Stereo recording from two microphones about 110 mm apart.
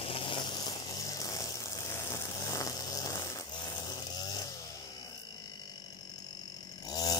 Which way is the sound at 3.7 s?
40° left (ahead or behind).